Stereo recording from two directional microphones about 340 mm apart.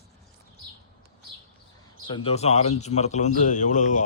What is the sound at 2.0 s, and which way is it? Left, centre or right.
A man's voice, centre.